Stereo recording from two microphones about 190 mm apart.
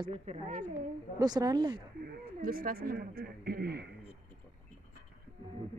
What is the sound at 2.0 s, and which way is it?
Speech, 50° right (ahead or behind).